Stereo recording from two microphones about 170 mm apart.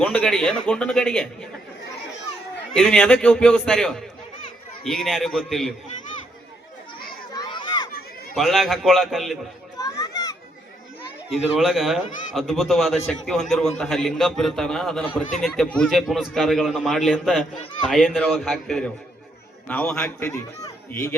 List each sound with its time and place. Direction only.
0.0 s a man's voice: 5° left (ahead or behind)
2.7 s a man's voice: 5° left (ahead or behind)
5.0 s a man's voice: centre (ahead or behind)
7.3 s a sound: 25° left (ahead or behind)
8.4 s a man's voice: centre (ahead or behind)
9.7 s children playing: 20° left (ahead or behind)
11.3 s a man's voice: centre (ahead or behind); by 21.1 s 20° left (ahead or behind)